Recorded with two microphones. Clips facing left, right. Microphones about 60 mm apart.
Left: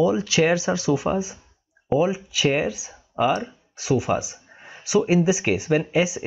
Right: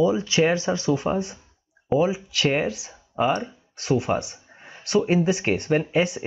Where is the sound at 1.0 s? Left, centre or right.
Centre.